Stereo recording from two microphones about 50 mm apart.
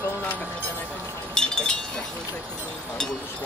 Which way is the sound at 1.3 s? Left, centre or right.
Centre.